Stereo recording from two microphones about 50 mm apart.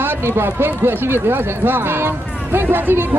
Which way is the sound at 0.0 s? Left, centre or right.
Right.